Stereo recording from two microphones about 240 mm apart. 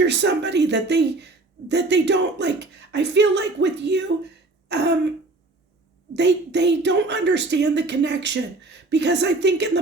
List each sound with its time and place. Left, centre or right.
0.1 s a woman's voice: right
6.1 s a woman's voice: right